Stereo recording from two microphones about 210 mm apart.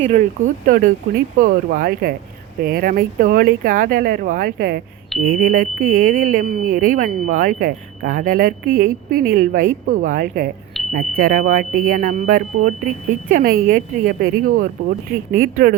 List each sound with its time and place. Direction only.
0.1 s speech: 35° right (ahead or behind)